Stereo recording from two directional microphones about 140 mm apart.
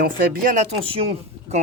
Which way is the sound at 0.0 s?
80° right.